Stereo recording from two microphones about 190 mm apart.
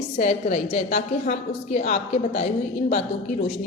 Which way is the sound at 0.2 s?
40° left (ahead or behind).